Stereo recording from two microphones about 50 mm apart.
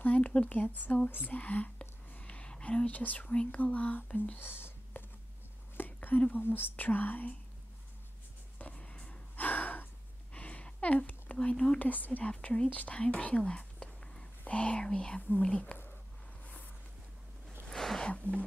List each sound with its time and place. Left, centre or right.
0.0 s speech: left
1.2 s whispering: left
3.0 s speech: left
4.4 s whispering: left
5.8 s a sound: left
6.4 s speech: left
8.7 s gasp: left
10.3 s a sound: left
11.5 s speech: centre
11.8 s speech: left
12.3 s speech: left
17.6 s a sound: centre
18.0 s a sound: left